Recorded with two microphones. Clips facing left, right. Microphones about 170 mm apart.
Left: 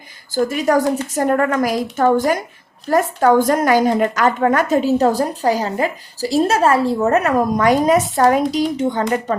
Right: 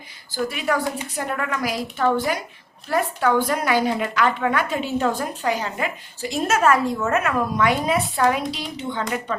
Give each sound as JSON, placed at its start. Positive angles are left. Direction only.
{"t": 0.3, "sound": "a woman's voice", "side_deg": 45}